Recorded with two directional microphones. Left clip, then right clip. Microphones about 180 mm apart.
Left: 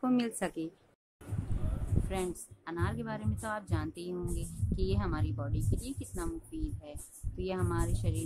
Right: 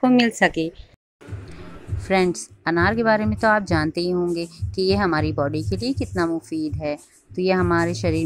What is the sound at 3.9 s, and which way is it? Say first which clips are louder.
Speech: right 18 dB; 15° right (ahead or behind).